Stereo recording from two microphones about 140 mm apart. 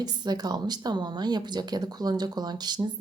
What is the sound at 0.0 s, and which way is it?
A woman's voice, 30° right (ahead or behind).